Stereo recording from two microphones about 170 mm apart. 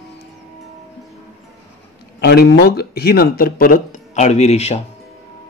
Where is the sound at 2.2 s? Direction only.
70° left (ahead or behind); by 4.8 s 40° left (ahead or behind).